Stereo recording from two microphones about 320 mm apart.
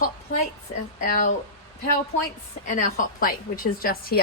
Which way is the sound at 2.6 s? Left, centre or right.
Left.